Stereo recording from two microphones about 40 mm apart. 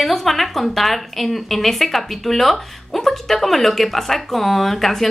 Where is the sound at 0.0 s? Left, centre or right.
Centre.